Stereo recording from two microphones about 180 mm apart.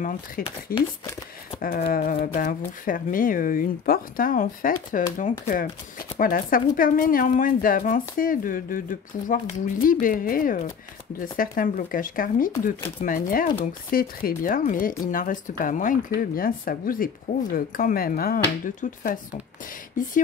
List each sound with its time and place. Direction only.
0.4 s speech: 55° left (ahead or behind)
1.6 s speech: 55° left (ahead or behind)
6.1 s speech: 50° left (ahead or behind)